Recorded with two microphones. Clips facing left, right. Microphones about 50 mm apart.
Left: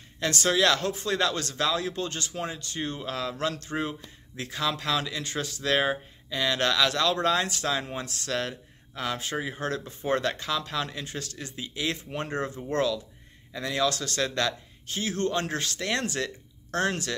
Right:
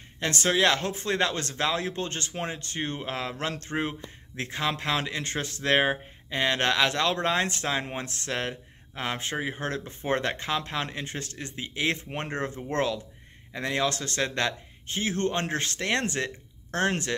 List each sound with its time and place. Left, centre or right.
0.2 s speech: right